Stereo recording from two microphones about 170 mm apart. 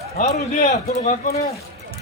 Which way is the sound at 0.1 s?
40° left (ahead or behind).